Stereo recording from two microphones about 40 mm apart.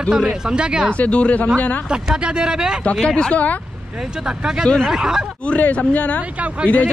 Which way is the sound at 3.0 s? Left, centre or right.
Left.